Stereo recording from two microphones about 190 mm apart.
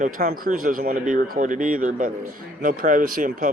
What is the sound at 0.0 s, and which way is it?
Speech, 50° right (ahead or behind).